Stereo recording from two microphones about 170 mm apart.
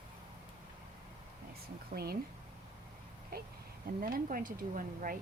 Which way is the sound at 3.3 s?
65° right (ahead or behind).